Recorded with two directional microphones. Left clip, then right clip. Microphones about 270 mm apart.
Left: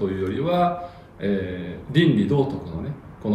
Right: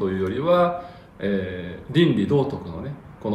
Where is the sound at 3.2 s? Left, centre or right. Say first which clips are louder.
Left 1 dB; centre.